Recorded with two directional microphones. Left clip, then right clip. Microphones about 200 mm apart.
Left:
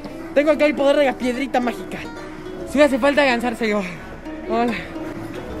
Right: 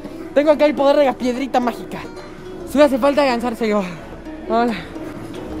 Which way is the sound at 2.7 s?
10° right (ahead or behind).